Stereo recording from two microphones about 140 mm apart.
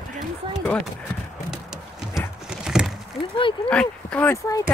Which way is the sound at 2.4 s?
5° right (ahead or behind).